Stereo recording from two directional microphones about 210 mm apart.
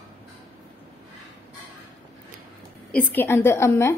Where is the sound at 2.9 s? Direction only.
10° left (ahead or behind).